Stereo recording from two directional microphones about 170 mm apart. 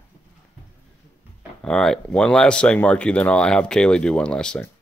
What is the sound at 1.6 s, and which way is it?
Speech, 5° left (ahead or behind).